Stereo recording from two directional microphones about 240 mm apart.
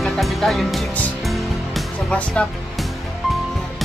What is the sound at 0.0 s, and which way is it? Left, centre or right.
Music, centre.